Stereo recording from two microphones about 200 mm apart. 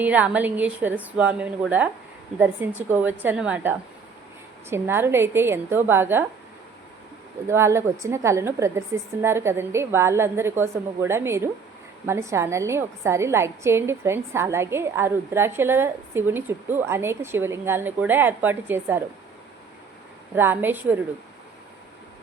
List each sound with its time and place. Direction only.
0.0 s a woman's voice: 10° right (ahead or behind)
7.4 s a woman's voice: 15° right (ahead or behind)
20.3 s a woman's voice: 10° right (ahead or behind)